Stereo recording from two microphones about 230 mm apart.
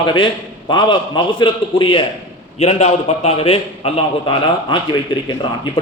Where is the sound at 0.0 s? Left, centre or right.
Left.